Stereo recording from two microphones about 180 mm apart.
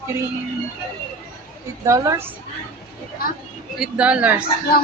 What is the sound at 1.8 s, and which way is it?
Speech, 15° right (ahead or behind).